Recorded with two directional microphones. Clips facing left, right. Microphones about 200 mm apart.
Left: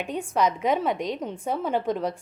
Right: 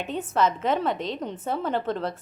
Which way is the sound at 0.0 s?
15° left (ahead or behind).